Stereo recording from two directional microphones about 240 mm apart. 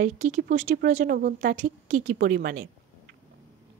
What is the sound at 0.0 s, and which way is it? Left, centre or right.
Speech, right.